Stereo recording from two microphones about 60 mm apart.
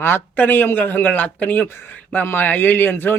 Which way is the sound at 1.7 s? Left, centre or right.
Left.